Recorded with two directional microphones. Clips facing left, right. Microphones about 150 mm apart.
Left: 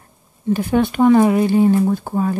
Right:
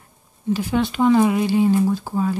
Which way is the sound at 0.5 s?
55° left (ahead or behind).